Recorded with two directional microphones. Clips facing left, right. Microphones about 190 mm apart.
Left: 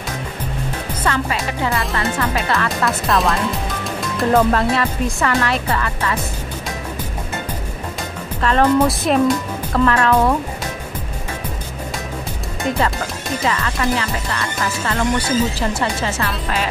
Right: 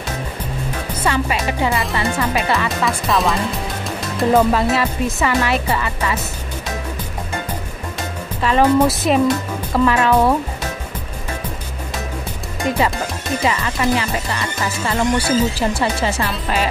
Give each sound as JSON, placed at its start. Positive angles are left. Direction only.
{"t": 1.0, "sound": "speech", "side_deg": -15}
{"t": 2.8, "sound": "speech", "side_deg": 0}
{"t": 8.4, "sound": "speech", "side_deg": -5}
{"t": 13.5, "sound": "speech", "side_deg": -15}